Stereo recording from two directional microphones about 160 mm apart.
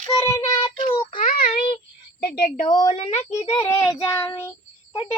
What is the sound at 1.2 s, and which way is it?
Child singing, 50° left (ahead or behind).